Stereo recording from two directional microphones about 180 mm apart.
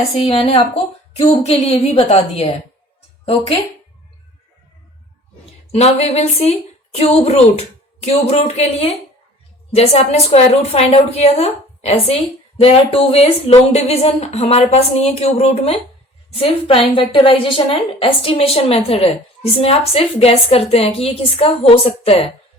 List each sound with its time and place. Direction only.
0.2 s a woman's voice: 30° left (ahead or behind)
5.7 s a woman's voice: 35° left (ahead or behind)